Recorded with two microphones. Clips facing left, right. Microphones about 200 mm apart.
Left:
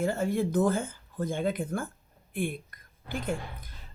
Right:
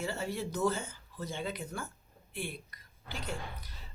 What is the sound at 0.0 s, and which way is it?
A woman's voice, 50° left (ahead or behind).